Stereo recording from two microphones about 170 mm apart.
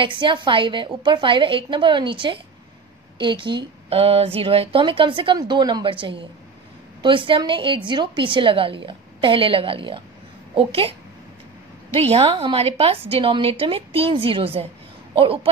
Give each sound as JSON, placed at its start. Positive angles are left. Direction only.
{"t": 0.0, "sound": "a woman's voice", "side_deg": -30}